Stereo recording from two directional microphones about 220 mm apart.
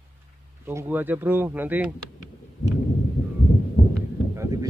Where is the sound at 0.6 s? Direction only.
10° right (ahead or behind).